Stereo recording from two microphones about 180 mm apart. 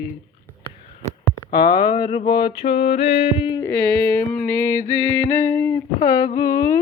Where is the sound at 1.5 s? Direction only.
25° left (ahead or behind).